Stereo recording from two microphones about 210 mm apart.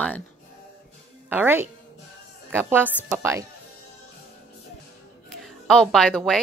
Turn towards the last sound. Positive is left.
turn(degrees=0)  # may be behind; listen again after turning